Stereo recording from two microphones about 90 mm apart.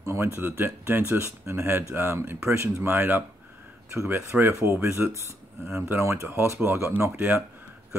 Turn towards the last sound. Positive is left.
turn(degrees=-25)  # may be behind; listen again after turning